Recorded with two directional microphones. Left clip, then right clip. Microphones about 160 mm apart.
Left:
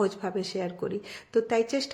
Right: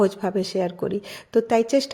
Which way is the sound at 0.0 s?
35° right (ahead or behind).